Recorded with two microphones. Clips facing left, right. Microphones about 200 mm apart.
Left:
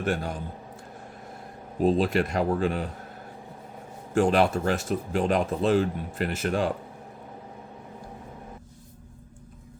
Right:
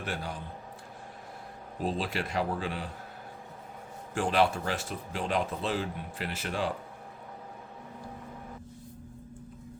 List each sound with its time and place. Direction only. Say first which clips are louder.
0.0 s speech: left 8 dB; 45° left (ahead or behind)
1.8 s speech: left 10 dB; 45° left (ahead or behind)
4.1 s speech: left 5 dB; 45° left (ahead or behind)